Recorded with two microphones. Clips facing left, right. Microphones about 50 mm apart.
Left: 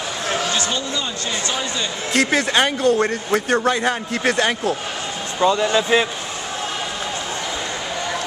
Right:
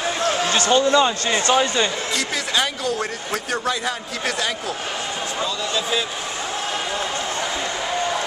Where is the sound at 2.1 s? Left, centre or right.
Left.